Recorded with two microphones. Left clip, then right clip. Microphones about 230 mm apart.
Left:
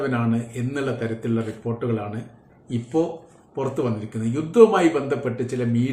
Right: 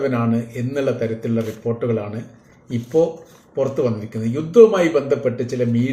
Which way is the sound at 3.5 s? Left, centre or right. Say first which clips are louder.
Right 5 dB; centre.